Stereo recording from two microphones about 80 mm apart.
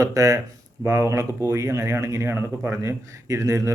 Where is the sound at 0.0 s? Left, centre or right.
Right.